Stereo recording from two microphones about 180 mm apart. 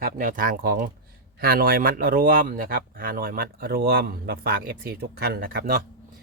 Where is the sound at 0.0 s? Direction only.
50° right (ahead or behind).